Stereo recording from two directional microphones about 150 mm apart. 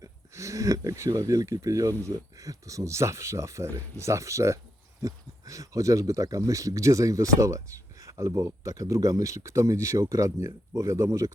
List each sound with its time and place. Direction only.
0.0 s speech: 20° right (ahead or behind)